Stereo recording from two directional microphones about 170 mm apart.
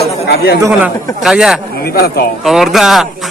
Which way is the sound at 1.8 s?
65° left (ahead or behind).